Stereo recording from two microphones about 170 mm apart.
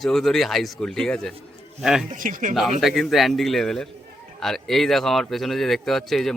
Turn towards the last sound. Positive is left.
turn(degrees=0)  # may be behind; listen again after turning